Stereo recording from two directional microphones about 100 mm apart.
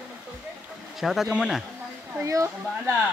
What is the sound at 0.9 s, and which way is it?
Speech, centre (ahead or behind).